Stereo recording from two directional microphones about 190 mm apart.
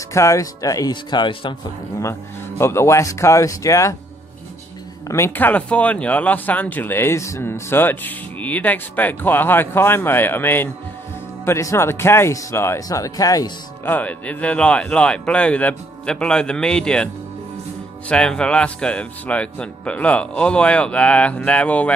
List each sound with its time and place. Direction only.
0.1 s speech: 15° left (ahead or behind)
2.6 s speech: 15° left (ahead or behind)
5.0 s speech: 15° left (ahead or behind)